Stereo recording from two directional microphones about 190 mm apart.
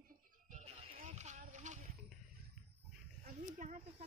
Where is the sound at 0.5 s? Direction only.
35° right (ahead or behind).